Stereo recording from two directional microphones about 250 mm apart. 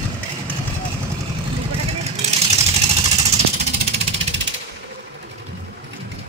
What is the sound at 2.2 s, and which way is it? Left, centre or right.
Vehicle, right.